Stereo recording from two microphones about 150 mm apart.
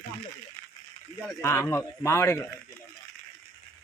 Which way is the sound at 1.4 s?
15° left (ahead or behind).